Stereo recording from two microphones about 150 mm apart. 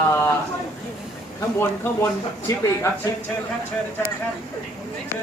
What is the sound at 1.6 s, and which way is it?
Speech, 20° left (ahead or behind).